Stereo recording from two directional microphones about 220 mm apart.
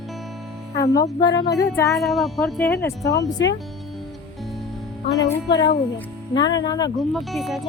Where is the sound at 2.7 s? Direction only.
15° left (ahead or behind).